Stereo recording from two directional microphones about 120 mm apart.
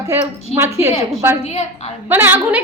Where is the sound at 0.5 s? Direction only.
20° right (ahead or behind).